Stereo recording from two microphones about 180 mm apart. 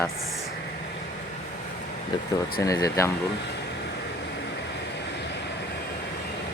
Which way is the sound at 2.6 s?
20° left (ahead or behind).